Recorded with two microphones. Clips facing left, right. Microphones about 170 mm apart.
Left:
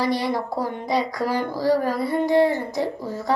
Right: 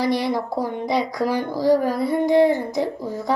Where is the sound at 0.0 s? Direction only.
10° right (ahead or behind).